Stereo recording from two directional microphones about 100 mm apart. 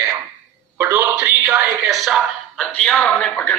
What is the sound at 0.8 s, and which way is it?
Music, 25° right (ahead or behind).